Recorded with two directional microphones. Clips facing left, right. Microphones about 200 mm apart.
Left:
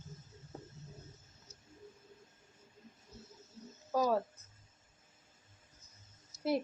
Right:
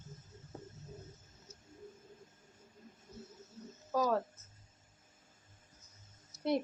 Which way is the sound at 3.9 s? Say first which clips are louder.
Left 1 dB; 10° left (ahead or behind).